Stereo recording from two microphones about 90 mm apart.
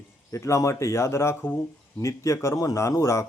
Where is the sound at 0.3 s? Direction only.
35° left (ahead or behind).